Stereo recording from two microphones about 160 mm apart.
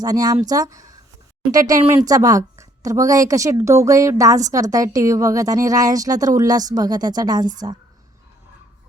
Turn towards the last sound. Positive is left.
turn(degrees=-25)  # may be behind; listen again after turning